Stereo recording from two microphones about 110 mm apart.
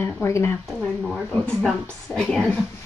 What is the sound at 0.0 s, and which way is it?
Speech, 25° left (ahead or behind).